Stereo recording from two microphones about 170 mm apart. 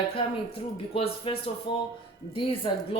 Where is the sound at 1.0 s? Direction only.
35° left (ahead or behind).